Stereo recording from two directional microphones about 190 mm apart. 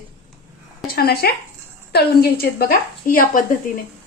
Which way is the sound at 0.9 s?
55° left (ahead or behind).